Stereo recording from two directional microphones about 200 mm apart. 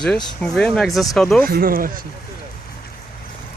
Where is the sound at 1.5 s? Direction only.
45° right (ahead or behind).